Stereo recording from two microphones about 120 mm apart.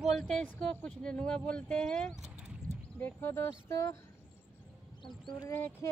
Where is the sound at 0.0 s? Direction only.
Centre (ahead or behind).